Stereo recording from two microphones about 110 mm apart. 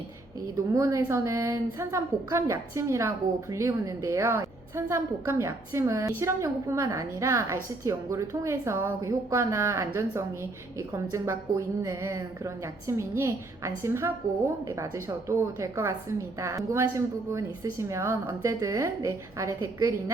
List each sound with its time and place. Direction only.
0.5 s a woman's voice: 30° right (ahead or behind)